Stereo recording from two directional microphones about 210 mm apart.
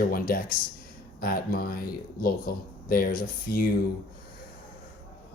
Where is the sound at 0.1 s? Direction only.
45° left (ahead or behind).